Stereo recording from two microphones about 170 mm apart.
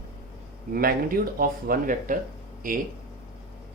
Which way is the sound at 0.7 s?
60° right (ahead or behind).